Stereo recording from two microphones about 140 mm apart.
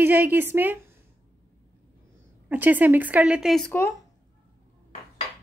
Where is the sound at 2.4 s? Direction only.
10° right (ahead or behind).